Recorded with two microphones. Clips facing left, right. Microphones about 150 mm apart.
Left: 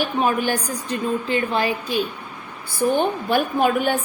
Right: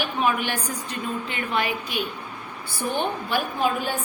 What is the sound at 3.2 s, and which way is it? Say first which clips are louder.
Speech: left 5 dB; 55° left (ahead or behind).